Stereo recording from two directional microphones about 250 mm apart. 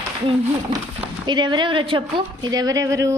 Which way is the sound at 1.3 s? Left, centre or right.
Centre.